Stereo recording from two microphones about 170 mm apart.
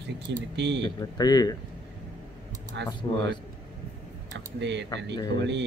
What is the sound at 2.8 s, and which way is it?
Speech, 90° right.